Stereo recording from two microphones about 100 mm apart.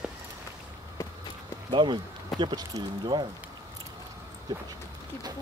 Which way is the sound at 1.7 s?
50° right (ahead or behind).